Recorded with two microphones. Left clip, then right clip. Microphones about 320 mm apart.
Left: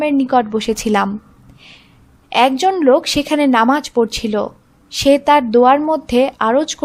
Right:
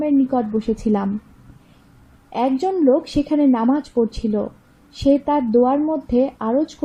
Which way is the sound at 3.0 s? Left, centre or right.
Left.